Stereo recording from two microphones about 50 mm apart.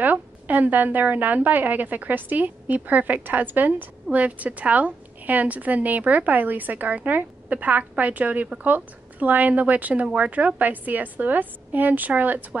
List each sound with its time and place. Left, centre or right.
0.0 s a woman's voice: right